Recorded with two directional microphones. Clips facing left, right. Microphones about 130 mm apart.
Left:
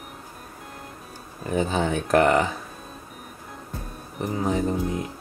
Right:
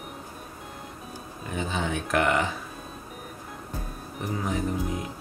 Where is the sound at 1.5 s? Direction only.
40° left (ahead or behind).